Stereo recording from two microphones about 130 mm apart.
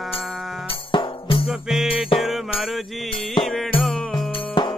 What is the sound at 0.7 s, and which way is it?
Music, 40° left (ahead or behind).